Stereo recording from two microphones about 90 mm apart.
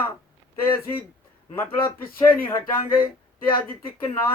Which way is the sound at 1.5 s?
25° left (ahead or behind).